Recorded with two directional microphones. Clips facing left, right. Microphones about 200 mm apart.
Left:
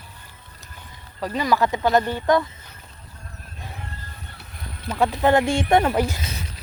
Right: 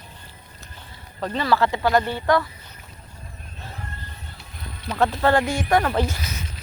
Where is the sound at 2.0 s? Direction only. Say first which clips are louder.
Left 1 dB; 15° right (ahead or behind).